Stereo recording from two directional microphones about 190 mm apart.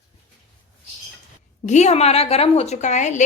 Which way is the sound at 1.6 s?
35° left (ahead or behind).